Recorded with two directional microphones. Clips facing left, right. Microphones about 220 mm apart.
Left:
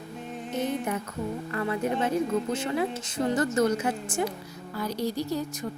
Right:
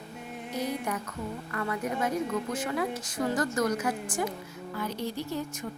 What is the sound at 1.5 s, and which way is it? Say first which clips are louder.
Speech: left 4 dB; 25° left (ahead or behind).